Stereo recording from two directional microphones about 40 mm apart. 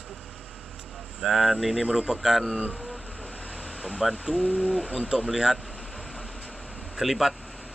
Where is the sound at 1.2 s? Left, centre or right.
Centre.